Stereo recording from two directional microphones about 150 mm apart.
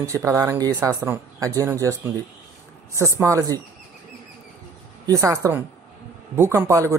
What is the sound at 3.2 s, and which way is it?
Speech, 20° right (ahead or behind).